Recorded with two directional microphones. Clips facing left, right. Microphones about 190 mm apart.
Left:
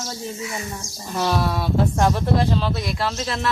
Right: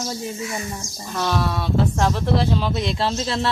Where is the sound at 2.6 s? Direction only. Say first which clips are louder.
Right 2 dB; 20° right (ahead or behind).